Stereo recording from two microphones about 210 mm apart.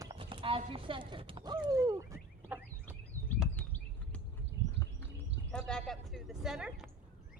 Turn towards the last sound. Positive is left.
turn(degrees=-5)  # may be behind; listen again after turning